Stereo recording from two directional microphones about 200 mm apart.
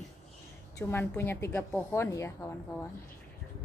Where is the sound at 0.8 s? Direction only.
10° left (ahead or behind).